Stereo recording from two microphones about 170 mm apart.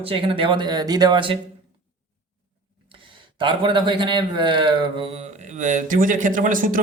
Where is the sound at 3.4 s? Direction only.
30° right (ahead or behind).